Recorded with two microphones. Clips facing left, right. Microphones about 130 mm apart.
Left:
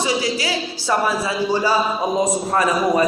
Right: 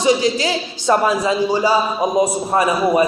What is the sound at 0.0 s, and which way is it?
Speech, 20° right (ahead or behind).